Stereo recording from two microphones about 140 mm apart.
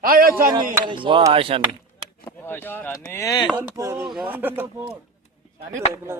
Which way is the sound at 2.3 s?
15° left (ahead or behind).